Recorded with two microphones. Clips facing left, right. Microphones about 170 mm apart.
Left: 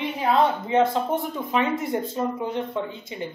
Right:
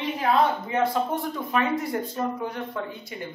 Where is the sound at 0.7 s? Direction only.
20° left (ahead or behind).